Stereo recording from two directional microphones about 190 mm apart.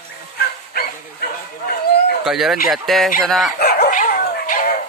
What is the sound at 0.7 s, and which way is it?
Dog, 55° left (ahead or behind).